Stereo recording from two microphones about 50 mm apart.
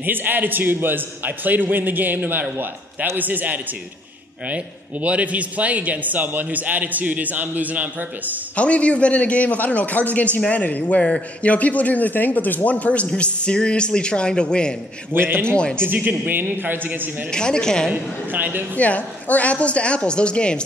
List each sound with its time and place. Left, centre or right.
0.0 s a man's voice: right
5.0 s a man's voice: right
8.5 s a man's voice: left
15.1 s a man's voice: right
15.4 s a man's voice: centre
15.8 s a man's voice: right
17.3 s speech: centre
17.9 s a man's voice: right
18.8 s a man's voice: left